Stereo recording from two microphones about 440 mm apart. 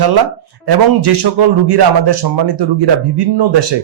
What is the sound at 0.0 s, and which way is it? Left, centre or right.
A man's voice, right.